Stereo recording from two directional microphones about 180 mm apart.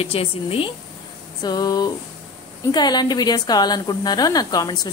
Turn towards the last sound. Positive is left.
turn(degrees=20)  # may be behind; listen again after turning